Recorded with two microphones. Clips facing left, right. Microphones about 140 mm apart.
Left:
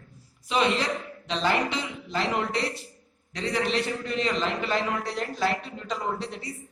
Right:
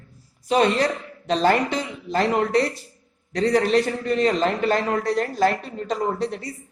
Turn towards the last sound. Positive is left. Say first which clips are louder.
# right 7 dB
turn(degrees=-45)  # may be behind; listen again after turning